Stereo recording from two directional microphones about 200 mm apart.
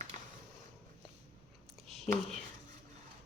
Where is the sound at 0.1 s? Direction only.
35° right (ahead or behind).